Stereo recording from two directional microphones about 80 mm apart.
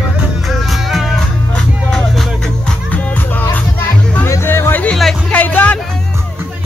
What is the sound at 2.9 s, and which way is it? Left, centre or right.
Music, left.